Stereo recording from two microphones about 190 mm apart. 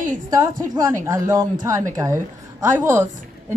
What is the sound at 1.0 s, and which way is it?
Speech, 15° right (ahead or behind).